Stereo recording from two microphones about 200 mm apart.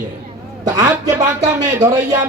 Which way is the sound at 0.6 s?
20° right (ahead or behind).